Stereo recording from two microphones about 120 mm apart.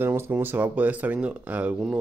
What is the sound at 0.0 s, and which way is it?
Speech, 20° right (ahead or behind).